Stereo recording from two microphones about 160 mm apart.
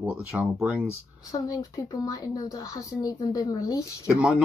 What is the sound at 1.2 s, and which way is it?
Speech, 25° left (ahead or behind).